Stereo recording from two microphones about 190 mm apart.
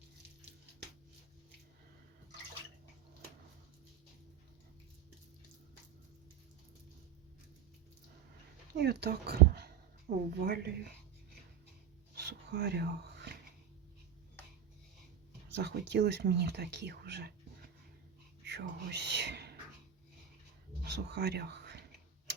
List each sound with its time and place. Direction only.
8.7 s speech: 60° right (ahead or behind)
12.1 s a sound: 60° right (ahead or behind)
15.5 s speech: 65° right (ahead or behind)
18.4 s speech: 65° right (ahead or behind)
20.8 s speech: 60° right (ahead or behind)